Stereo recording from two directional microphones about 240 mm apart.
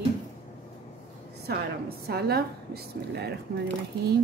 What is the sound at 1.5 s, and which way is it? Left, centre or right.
Speech, right.